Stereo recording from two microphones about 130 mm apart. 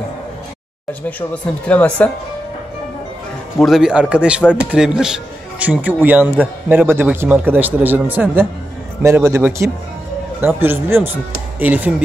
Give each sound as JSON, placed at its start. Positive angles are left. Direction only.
{"t": 1.3, "sound": "speech", "side_deg": 10}
{"t": 3.5, "sound": "a man's voice", "side_deg": 0}